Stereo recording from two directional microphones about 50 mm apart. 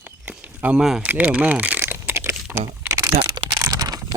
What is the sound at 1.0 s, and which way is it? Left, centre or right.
Speech, right.